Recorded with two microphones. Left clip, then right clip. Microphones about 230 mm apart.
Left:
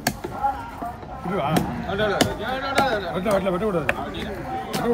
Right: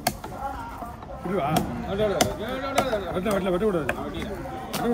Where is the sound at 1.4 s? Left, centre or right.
Left.